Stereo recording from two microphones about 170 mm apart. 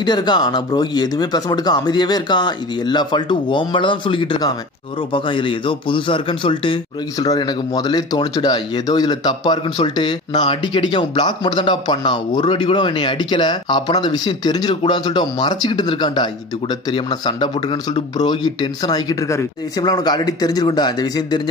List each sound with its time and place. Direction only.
0.0 s a man's voice: 25° left (ahead or behind)